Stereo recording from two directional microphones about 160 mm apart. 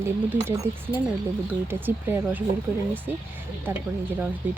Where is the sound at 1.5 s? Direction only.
10° right (ahead or behind).